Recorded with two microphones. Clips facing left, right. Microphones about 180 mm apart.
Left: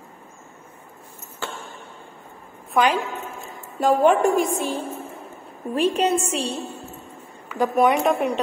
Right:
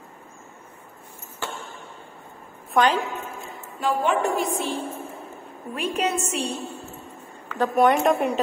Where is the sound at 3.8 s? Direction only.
45° left (ahead or behind).